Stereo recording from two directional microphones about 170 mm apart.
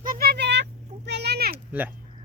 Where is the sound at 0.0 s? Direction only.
60° right (ahead or behind).